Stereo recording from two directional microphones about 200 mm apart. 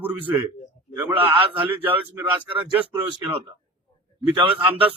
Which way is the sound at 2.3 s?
25° right (ahead or behind).